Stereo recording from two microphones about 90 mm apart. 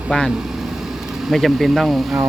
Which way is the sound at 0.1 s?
Centre (ahead or behind).